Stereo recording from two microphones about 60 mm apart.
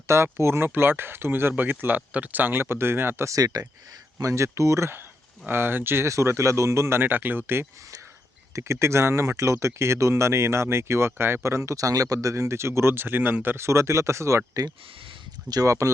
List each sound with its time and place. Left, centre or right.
0.1 s speech: right
2.0 s speech: right
3.2 s speech: right
4.2 s speech: right
6.1 s speech: right
8.5 s speech: right
12.3 s speech: right
13.7 s speech: right
15.4 s speech: right